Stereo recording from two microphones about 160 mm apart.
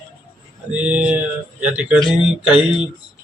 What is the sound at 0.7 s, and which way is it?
Speech, 10° right (ahead or behind).